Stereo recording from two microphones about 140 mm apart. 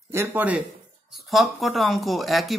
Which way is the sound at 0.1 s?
15° right (ahead or behind).